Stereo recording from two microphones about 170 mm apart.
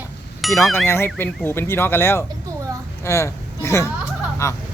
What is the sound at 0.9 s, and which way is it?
A woman's voice, 15° left (ahead or behind).